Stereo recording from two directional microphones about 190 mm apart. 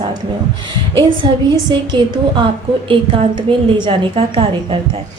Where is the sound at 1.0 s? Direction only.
25° right (ahead or behind).